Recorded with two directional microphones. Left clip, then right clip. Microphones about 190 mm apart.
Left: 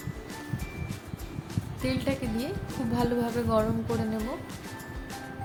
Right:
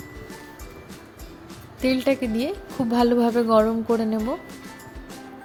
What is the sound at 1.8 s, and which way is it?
A woman's voice, 35° right (ahead or behind).